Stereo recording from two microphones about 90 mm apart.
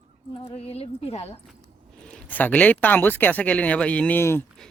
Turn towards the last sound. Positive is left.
turn(degrees=15)  # may be behind; listen again after turning